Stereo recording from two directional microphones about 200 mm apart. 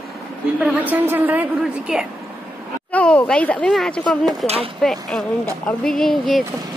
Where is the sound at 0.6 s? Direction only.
5° right (ahead or behind).